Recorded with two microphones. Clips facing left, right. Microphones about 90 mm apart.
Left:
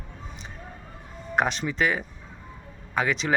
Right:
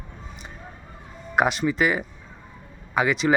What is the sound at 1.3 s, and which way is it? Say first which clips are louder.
Speech: right 4 dB; 5° right (ahead or behind).